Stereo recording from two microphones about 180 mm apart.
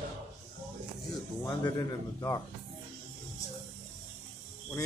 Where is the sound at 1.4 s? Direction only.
20° left (ahead or behind).